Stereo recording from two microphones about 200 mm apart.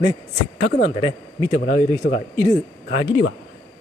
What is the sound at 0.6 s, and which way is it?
Speech, 40° left (ahead or behind).